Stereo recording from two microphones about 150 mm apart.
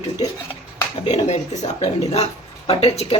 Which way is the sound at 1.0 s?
50° left (ahead or behind).